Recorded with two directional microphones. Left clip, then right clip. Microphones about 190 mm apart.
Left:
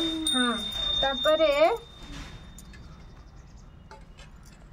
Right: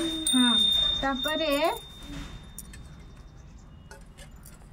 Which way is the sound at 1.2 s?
20° left (ahead or behind).